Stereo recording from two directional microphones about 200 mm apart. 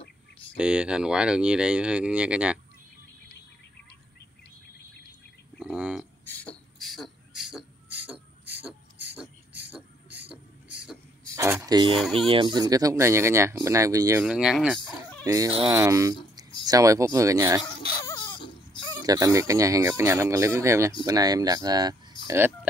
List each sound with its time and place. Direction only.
0.6 s speech: 5° right (ahead or behind)
5.6 s speech: 5° right (ahead or behind)
6.2 s beatboxing: 5° left (ahead or behind)
11.3 s speech: 15° right (ahead or behind)
11.9 s speech: centre (ahead or behind)
12.3 s speech: 25° right (ahead or behind)
14.2 s speech: 5° right (ahead or behind)
15.2 s speech: 15° right (ahead or behind)
18.0 s a sound: 20° left (ahead or behind)
19.0 s speech: 20° right (ahead or behind)